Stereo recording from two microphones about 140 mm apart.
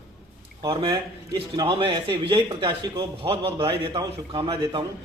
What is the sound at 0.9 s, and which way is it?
Speech, 30° right (ahead or behind).